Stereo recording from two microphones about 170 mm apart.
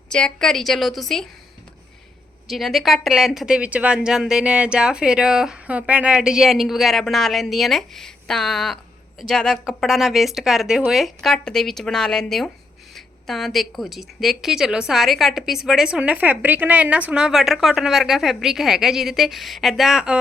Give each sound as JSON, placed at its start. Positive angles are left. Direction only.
{"t": 0.1, "sound": "speech", "side_deg": 5}
{"t": 2.5, "sound": "speech", "side_deg": 0}